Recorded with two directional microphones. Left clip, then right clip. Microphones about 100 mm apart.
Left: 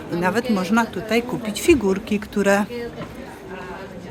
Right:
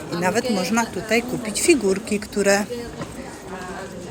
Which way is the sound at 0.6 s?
30° left (ahead or behind).